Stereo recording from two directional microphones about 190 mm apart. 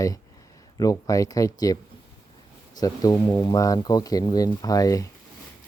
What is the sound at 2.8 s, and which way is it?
Speech, 20° left (ahead or behind).